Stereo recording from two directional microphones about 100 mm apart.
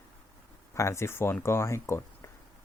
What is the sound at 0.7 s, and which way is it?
Speech, 30° left (ahead or behind).